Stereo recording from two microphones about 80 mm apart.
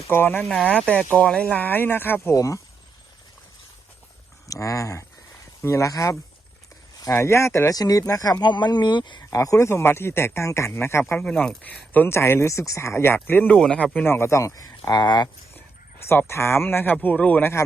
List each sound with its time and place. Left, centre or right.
0.1 s speech: left
0.9 s speech: centre
2.3 s speech: left
4.4 s speech: left
7.7 s speech: left
8.4 s speech: left
9.3 s speech: left
11.2 s speech: centre
13.6 s speech: centre
14.0 s speech: left
16.0 s speech: left